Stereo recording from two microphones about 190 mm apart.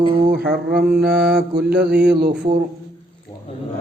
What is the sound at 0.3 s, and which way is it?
A man's voice, 55° right (ahead or behind).